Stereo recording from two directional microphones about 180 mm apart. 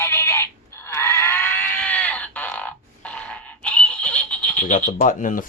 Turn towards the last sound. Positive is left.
turn(degrees=45)  # may be behind; listen again after turning